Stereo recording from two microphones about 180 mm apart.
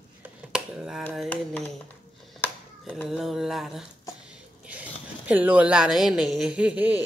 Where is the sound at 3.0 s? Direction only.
Centre (ahead or behind).